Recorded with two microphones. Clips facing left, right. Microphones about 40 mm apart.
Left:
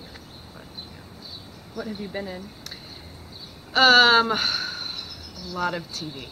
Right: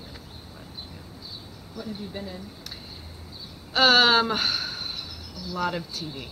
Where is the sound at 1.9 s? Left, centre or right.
Left.